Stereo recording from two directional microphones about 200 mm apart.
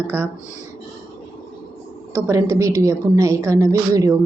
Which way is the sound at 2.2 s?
15° right (ahead or behind).